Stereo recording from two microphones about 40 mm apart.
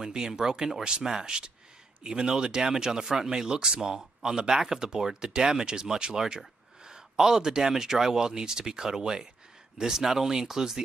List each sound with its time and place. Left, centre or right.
0.1 s speech: centre